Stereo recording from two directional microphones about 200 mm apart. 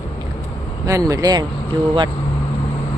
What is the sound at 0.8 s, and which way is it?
Speech, 15° right (ahead or behind).